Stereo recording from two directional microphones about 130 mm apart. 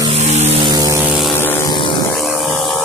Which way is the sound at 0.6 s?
30° right (ahead or behind).